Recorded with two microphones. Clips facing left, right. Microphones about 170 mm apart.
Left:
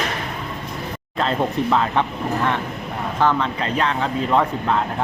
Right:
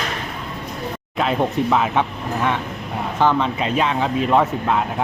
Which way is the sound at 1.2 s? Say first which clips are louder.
Right 1 dB; 10° right (ahead or behind).